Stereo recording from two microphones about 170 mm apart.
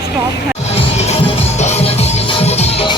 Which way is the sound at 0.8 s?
40° left (ahead or behind).